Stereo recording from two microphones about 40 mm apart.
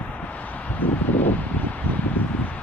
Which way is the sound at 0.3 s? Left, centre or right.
Left.